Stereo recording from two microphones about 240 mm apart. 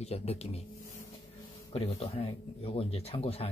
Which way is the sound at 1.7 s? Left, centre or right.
Left.